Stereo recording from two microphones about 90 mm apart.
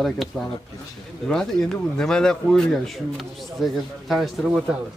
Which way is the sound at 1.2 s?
5° left (ahead or behind).